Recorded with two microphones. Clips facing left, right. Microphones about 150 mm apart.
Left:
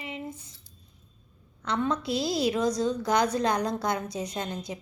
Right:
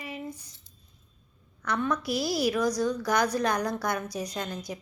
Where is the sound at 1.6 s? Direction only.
25° left (ahead or behind).